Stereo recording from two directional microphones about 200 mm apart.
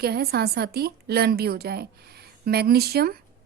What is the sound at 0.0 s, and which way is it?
Speech, 50° right (ahead or behind).